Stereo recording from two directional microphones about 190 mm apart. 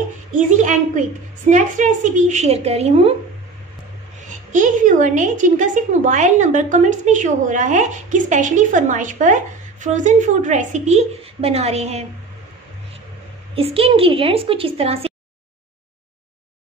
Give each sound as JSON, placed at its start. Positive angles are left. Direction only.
{"t": 0.3, "sound": "a woman's voice", "side_deg": -40}
{"t": 4.2, "sound": "a woman's voice", "side_deg": -40}
{"t": 13.6, "sound": "a woman's voice", "side_deg": -30}